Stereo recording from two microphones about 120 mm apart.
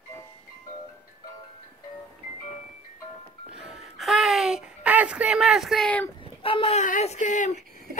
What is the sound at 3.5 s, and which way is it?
Music, 5° right (ahead or behind).